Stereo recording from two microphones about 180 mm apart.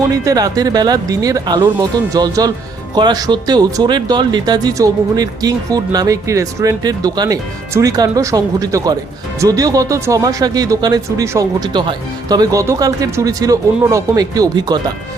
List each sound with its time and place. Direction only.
0.1 s speech: 20° right (ahead or behind)